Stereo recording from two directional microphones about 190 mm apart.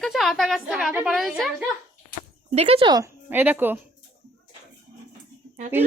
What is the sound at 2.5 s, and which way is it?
A woman's voice, 30° right (ahead or behind).